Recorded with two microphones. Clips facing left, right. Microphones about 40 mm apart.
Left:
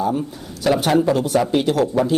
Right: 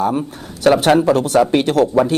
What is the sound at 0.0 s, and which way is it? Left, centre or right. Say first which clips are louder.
Speech: right 3 dB; right.